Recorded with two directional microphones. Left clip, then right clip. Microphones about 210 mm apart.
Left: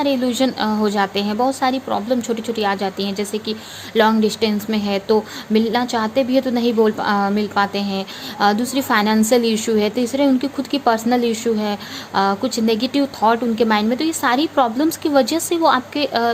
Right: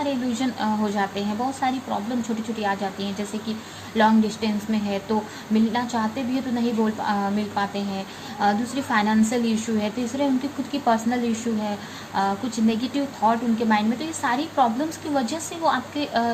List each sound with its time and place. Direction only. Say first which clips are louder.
0.0 s a woman's voice: left 8 dB; 55° left (ahead or behind)